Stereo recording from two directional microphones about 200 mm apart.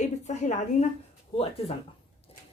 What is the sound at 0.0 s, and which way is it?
Speech, 35° left (ahead or behind).